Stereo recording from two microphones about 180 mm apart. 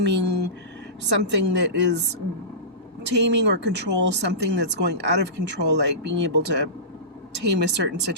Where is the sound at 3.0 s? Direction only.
75° right (ahead or behind).